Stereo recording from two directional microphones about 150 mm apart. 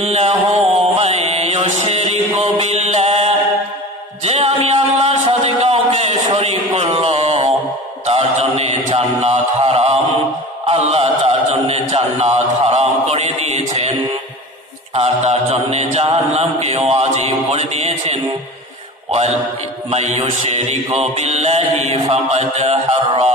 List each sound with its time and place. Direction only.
0.0 s mantra: 45° right (ahead or behind)
4.2 s music: 45° right (ahead or behind)
8.1 s mantra: 45° right (ahead or behind)
15.0 s mantra: 45° right (ahead or behind)
19.9 s mantra: 50° right (ahead or behind)